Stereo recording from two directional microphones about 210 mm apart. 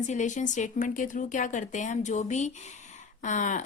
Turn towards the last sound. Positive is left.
turn(degrees=35)  # may be behind; listen again after turning